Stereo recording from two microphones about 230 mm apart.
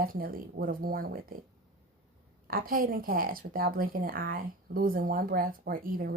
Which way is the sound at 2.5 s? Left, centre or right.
Right.